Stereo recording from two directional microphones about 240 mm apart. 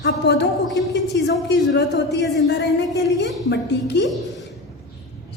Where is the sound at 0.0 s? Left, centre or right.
Left.